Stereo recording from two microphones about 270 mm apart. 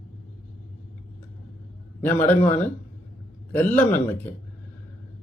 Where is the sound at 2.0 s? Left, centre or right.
Centre.